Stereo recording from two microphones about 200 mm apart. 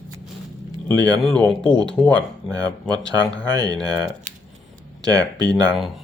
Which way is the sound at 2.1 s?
20° right (ahead or behind).